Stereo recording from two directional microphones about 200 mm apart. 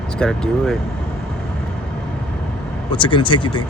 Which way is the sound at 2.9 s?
25° left (ahead or behind).